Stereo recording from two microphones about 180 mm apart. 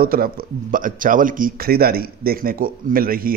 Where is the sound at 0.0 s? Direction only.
55° right (ahead or behind).